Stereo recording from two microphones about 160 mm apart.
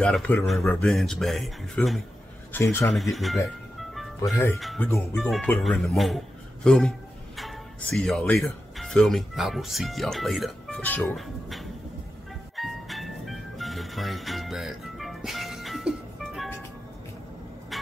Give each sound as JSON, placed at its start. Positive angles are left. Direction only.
{"t": 0.0, "sound": "speech", "side_deg": 5}
{"t": 2.9, "sound": "speech", "side_deg": 0}
{"t": 4.2, "sound": "speech", "side_deg": 15}
{"t": 11.1, "sound": "speech", "side_deg": 0}
{"t": 12.5, "sound": "music", "side_deg": 0}